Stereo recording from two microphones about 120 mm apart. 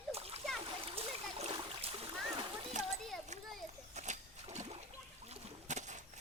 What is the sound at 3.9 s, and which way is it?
Boat, 75° right (ahead or behind).